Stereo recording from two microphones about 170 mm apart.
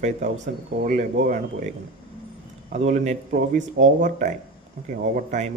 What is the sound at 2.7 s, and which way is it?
Speech, 45° right (ahead or behind).